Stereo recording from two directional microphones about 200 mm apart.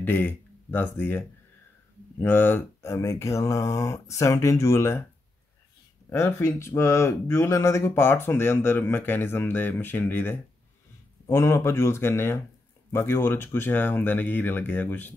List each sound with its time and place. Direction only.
0.0 s speech: 10° left (ahead or behind)
6.0 s speech: 10° left (ahead or behind)